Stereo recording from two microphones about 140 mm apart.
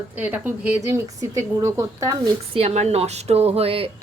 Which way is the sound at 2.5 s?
50° right (ahead or behind).